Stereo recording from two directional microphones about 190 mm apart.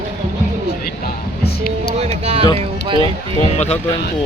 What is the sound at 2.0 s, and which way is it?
Music, 30° right (ahead or behind).